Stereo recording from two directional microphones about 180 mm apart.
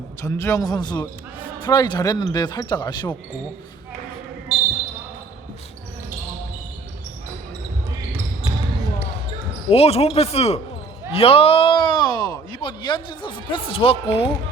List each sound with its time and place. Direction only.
0.2 s a man's voice: 15° left (ahead or behind)
4.5 s basketball bounce: centre (ahead or behind)
9.6 s a man's voice: 35° left (ahead or behind)